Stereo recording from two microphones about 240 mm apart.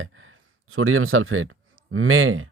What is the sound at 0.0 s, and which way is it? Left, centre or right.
Speech, right.